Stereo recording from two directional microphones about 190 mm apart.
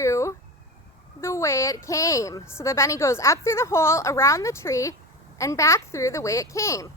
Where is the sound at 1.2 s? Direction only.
15° left (ahead or behind).